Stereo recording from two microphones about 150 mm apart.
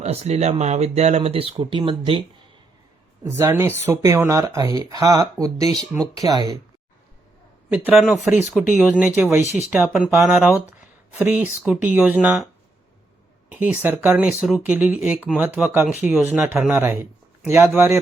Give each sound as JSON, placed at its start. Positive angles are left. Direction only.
{"t": 0.0, "sound": "speech", "side_deg": -45}
{"t": 3.2, "sound": "speech", "side_deg": -15}
{"t": 7.7, "sound": "speech", "side_deg": -10}
{"t": 7.9, "sound": "speech", "side_deg": 0}
{"t": 13.5, "sound": "speech", "side_deg": -10}